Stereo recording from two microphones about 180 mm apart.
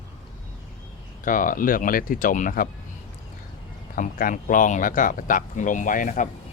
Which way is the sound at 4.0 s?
50° left (ahead or behind).